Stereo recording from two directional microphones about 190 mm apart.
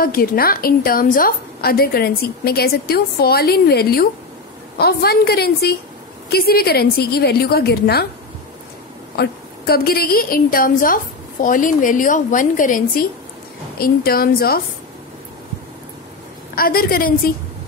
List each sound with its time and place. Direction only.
0.0 s a woman's voice: 50° left (ahead or behind)
9.1 s a woman's voice: 55° left (ahead or behind)
16.5 s a woman's voice: 50° left (ahead or behind)